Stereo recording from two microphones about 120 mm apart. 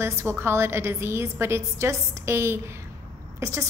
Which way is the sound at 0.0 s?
20° right (ahead or behind).